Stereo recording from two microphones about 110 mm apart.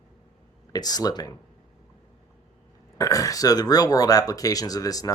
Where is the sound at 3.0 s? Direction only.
30° left (ahead or behind).